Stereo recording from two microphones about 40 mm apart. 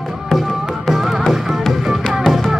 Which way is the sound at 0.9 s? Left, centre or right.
Centre.